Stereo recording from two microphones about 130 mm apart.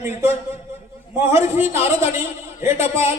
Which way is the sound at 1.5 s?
20° right (ahead or behind).